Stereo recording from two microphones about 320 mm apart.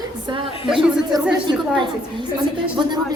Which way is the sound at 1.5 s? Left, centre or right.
Centre.